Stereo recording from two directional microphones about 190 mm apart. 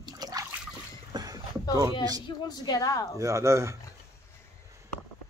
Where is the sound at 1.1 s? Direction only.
20° right (ahead or behind).